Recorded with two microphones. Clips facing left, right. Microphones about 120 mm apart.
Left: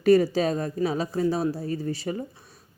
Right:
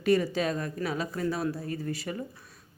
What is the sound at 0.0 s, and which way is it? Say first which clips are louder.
Speech: left 6 dB; 40° left (ahead or behind).